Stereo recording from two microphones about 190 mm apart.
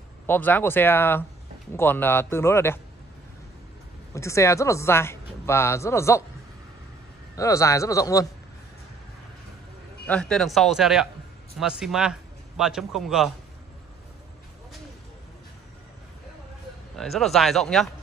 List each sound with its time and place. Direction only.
0.3 s speech: 10° left (ahead or behind)
4.1 s speech: 15° left (ahead or behind)
7.3 s speech: 15° left (ahead or behind)
10.0 s a man's voice: 5° left (ahead or behind)
16.9 s speech: centre (ahead or behind)